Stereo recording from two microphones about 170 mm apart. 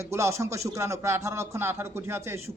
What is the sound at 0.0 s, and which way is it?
A man's voice, 15° right (ahead or behind).